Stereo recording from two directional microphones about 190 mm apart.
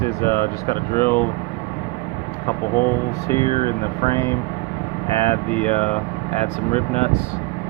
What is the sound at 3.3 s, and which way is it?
Speech, 25° right (ahead or behind).